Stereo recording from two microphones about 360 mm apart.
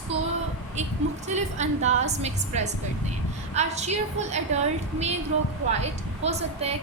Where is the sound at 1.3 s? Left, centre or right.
Centre.